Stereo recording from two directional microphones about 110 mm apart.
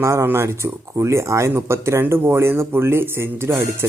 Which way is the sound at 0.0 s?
25° right (ahead or behind).